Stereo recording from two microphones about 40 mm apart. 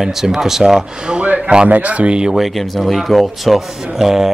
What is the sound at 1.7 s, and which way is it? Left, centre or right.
Speech, right.